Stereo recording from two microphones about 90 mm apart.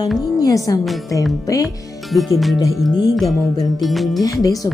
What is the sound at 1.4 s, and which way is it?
Speech, 40° left (ahead or behind).